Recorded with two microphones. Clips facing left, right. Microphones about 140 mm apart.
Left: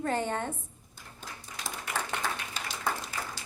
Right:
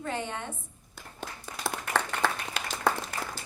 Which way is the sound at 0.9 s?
70° right (ahead or behind).